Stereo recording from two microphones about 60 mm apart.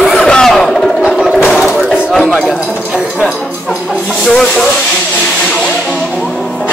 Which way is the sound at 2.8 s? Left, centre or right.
Centre.